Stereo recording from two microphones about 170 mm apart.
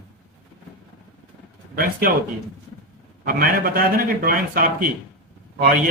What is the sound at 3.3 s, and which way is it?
A man's voice, 60° right (ahead or behind).